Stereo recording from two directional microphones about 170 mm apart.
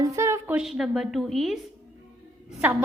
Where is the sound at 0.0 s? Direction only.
20° right (ahead or behind); by 1.5 s centre (ahead or behind).